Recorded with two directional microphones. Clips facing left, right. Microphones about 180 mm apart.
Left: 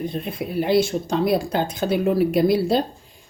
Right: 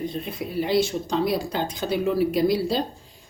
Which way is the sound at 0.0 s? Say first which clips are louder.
Left 2 dB; 55° left (ahead or behind).